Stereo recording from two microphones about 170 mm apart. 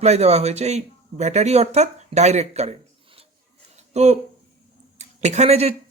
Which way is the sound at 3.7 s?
40° right (ahead or behind).